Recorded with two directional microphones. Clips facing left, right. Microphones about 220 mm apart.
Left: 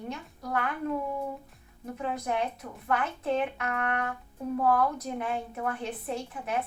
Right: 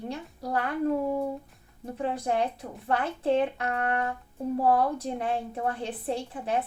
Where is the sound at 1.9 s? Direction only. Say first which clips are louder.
Right 3 dB; 30° right (ahead or behind).